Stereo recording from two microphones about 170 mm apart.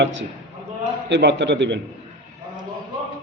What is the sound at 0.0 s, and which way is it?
A man's voice, 90° right.